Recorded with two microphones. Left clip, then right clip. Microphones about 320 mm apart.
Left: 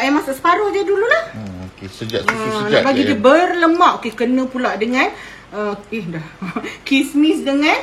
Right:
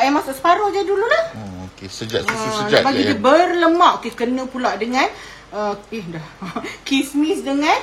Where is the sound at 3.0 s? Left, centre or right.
Centre.